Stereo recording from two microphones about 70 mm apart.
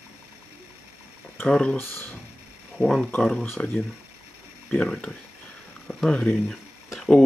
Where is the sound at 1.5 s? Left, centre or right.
Centre.